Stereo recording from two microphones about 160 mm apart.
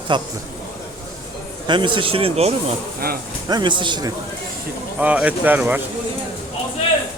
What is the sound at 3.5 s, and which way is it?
Speech, 30° right (ahead or behind).